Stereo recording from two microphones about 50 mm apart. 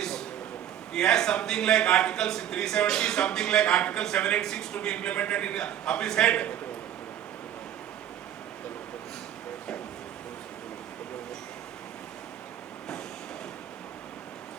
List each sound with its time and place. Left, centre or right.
0.9 s a man's voice: centre